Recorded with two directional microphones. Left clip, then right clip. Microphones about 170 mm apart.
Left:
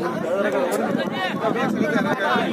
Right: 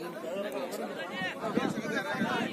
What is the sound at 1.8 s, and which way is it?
Speech, 35° left (ahead or behind).